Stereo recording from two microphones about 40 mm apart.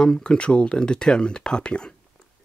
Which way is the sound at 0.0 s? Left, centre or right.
Centre.